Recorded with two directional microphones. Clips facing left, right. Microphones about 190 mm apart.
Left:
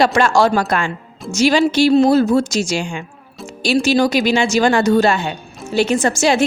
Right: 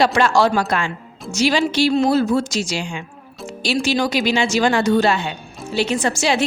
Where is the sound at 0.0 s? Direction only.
50° left (ahead or behind).